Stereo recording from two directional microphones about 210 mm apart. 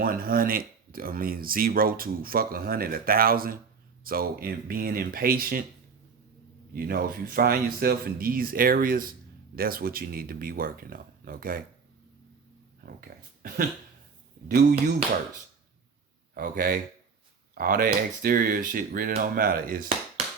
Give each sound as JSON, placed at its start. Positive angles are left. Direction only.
{"t": 0.0, "sound": "speech", "side_deg": -45}
{"t": 6.7, "sound": "speech", "side_deg": -45}
{"t": 12.8, "sound": "speech", "side_deg": -45}
{"t": 16.3, "sound": "speech", "side_deg": -45}